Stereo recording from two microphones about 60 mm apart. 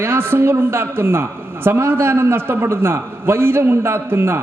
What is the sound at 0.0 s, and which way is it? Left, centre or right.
A woman's voice, right.